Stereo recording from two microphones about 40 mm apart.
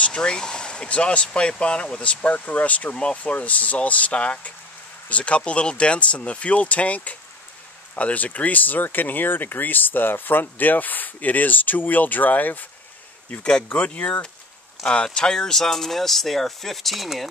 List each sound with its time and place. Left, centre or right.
0.0 s speech: left
13.4 s speech: left
13.7 s speech: left
14.8 s speech: centre
15.1 s speech: centre